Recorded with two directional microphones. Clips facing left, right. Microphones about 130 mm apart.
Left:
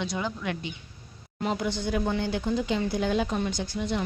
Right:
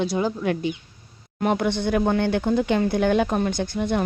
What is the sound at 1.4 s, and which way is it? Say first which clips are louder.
Speech: right 6 dB; 60° right (ahead or behind).